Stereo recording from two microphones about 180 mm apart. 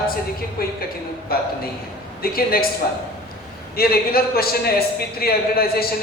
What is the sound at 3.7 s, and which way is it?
A man's voice, 60° left (ahead or behind).